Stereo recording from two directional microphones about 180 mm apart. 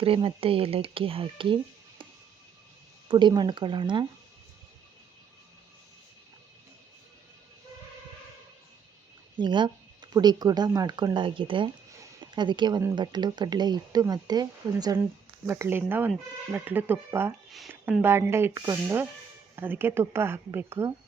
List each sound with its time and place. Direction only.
0.0 s speech: 30° right (ahead or behind)
3.1 s speech: 25° right (ahead or behind)
9.4 s speech: 25° right (ahead or behind)